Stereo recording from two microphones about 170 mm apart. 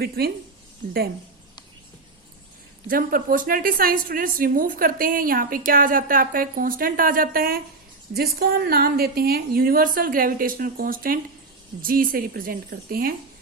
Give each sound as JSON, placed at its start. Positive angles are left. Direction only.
{"t": 0.2, "sound": "a woman's voice", "side_deg": -70}
{"t": 2.8, "sound": "a woman's voice", "side_deg": -55}